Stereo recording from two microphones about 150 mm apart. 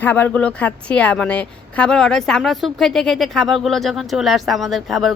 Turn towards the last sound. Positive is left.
turn(degrees=0)  # may be behind; listen again after turning